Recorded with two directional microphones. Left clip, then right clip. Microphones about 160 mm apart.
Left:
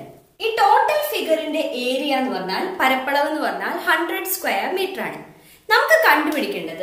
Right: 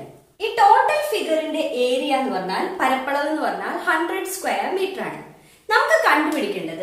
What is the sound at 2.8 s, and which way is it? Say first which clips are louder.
A woman's voice: left 3 dB; 10° left (ahead or behind).